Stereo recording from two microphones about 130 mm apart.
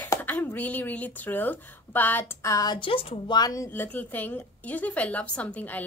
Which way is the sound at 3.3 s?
25° left (ahead or behind).